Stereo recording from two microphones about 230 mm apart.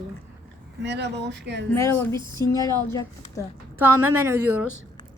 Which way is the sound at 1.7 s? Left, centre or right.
Centre.